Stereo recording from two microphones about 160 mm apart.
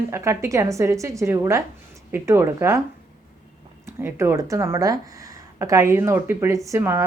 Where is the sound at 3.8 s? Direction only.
15° right (ahead or behind).